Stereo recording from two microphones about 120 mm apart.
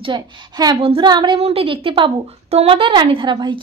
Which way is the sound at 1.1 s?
40° right (ahead or behind).